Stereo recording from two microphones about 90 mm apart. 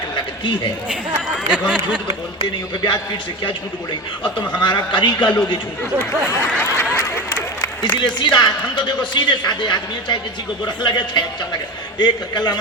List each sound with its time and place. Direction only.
1.5 s speech: 15° right (ahead or behind)
2.8 s a man's voice: 50° left (ahead or behind)
6.9 s applause: 30° left (ahead or behind)
7.9 s speech: 55° left (ahead or behind)